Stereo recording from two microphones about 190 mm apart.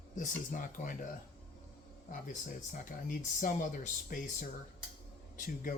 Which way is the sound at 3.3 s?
45° left (ahead or behind).